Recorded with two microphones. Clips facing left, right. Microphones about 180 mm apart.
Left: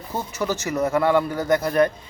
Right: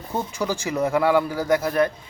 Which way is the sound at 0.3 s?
10° right (ahead or behind).